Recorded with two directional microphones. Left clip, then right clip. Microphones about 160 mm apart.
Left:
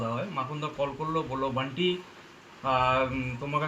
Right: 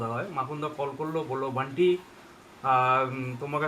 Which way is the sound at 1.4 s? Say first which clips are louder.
Right 7 dB; 10° right (ahead or behind).